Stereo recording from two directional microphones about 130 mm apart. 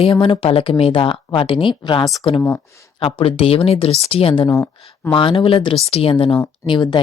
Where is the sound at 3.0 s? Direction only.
45° left (ahead or behind).